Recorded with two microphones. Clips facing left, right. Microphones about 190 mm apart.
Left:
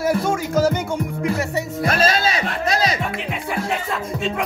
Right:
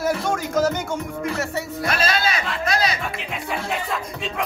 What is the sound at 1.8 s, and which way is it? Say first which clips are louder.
Speech: left 4 dB; 40° left (ahead or behind).